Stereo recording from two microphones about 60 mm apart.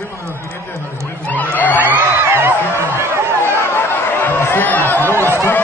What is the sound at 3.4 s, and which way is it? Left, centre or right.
Chatter, left.